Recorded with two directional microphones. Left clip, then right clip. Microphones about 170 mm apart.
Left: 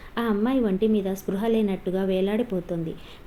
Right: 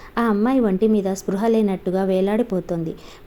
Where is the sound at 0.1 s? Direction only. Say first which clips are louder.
Right 5 dB; 30° right (ahead or behind).